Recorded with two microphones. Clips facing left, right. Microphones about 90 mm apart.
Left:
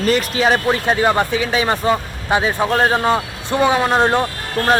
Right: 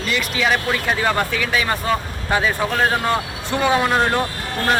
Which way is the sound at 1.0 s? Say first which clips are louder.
Left 4 dB; 20° left (ahead or behind).